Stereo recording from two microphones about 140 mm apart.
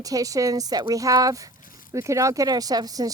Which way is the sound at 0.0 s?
25° right (ahead or behind).